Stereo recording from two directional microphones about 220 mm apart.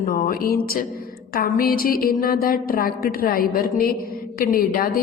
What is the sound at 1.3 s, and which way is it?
A woman's voice, 40° left (ahead or behind).